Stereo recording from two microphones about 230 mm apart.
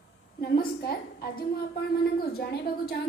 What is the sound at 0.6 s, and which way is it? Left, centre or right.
A woman's voice, left.